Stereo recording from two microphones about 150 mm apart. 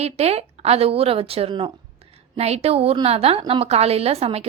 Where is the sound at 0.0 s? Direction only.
45° right (ahead or behind).